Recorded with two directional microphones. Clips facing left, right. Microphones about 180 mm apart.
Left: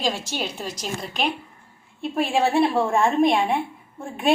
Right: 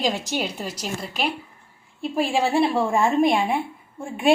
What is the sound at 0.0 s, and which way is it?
A woman's voice, 15° right (ahead or behind).